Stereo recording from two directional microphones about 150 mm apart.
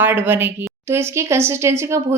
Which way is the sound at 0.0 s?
15° right (ahead or behind).